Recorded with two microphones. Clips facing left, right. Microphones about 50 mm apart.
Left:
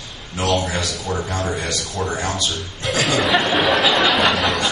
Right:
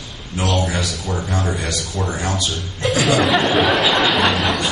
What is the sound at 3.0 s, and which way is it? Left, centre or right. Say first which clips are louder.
Speech: right 1 dB; centre.